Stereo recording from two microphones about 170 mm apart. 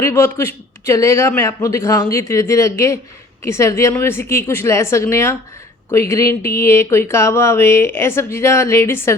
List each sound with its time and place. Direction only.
0.0 s speech: 15° left (ahead or behind)